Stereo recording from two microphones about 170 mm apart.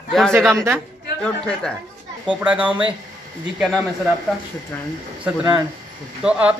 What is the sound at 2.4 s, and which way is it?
Speech, 10° right (ahead or behind).